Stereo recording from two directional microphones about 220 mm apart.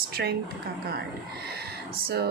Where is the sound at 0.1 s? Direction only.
45° right (ahead or behind).